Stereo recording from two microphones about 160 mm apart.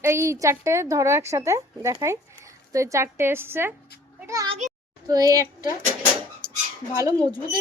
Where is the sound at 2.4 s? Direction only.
20° right (ahead or behind).